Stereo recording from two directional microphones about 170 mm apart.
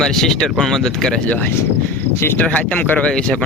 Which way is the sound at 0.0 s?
Centre (ahead or behind).